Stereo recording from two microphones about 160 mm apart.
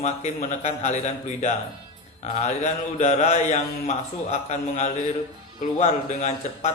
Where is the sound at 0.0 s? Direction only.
45° left (ahead or behind).